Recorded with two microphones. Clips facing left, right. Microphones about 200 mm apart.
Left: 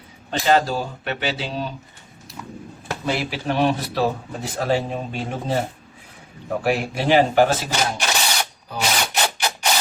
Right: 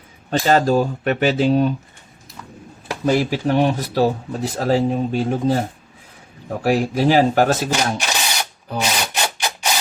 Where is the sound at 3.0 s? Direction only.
45° right (ahead or behind).